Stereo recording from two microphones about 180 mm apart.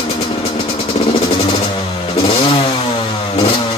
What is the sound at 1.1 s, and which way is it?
Vehicle, 35° left (ahead or behind).